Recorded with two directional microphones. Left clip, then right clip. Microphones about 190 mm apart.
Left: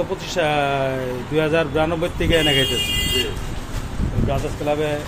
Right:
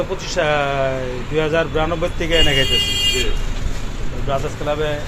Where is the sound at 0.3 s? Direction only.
20° left (ahead or behind).